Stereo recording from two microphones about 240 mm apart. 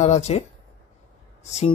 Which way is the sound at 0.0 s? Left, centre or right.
Left.